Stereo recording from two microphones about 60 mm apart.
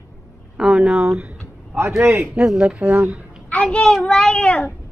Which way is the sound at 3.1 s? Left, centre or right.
Centre.